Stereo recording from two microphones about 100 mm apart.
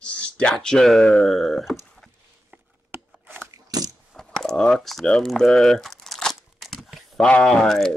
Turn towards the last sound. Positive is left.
turn(degrees=5)  # may be behind; listen again after turning